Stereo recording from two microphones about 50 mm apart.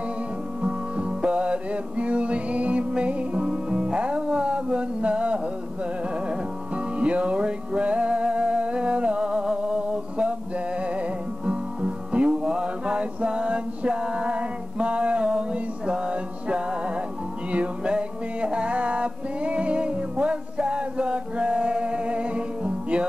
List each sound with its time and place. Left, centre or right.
0.6 s music: right